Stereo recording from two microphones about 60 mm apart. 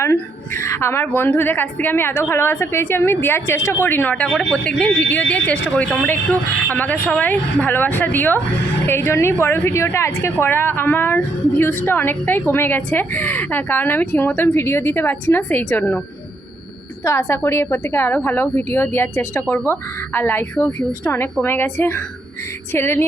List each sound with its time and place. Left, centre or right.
0.0 s a sound: left
1.0 s speech: left
4.8 s speech: centre
8.9 s a woman's voice: left
10.4 s speech: left
17.0 s a woman's voice: left